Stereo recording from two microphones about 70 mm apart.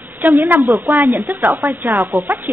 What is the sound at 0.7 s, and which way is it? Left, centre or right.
Speech, right.